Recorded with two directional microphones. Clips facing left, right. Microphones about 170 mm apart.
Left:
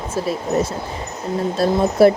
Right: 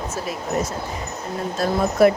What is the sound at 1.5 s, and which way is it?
Speech, 30° left (ahead or behind).